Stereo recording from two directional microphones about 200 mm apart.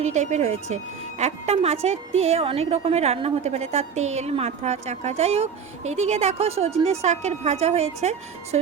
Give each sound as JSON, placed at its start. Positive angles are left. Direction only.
{"t": 0.0, "sound": "a woman's voice", "side_deg": -35}